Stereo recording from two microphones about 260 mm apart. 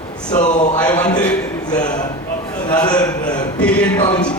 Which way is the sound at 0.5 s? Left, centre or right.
Left.